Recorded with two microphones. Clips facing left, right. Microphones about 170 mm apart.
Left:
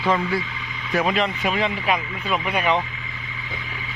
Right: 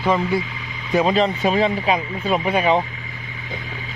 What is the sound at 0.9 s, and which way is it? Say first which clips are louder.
Speech: right 4 dB; 30° right (ahead or behind).